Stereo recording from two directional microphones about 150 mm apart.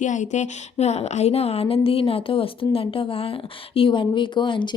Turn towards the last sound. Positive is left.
turn(degrees=30)  # may be behind; listen again after turning